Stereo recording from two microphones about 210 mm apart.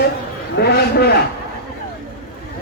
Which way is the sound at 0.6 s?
50° left (ahead or behind).